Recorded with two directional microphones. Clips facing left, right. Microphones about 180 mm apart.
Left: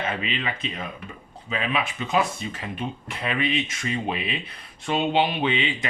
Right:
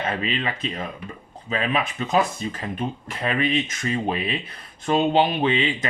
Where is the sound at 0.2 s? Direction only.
40° right (ahead or behind).